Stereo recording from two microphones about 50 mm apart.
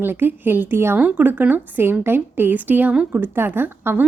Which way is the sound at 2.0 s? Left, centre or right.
Right.